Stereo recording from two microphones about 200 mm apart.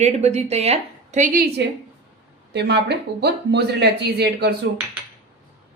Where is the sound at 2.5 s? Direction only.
60° right (ahead or behind).